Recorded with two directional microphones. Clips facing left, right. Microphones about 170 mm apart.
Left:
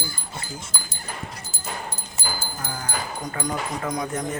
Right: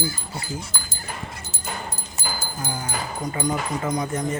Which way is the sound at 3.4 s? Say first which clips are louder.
Right 3 dB; centre (ahead or behind).